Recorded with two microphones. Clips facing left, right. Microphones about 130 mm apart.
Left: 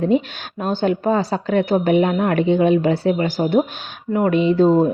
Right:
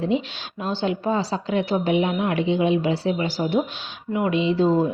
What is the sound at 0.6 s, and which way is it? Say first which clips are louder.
A woman's voice: left 5 dB; 50° left (ahead or behind).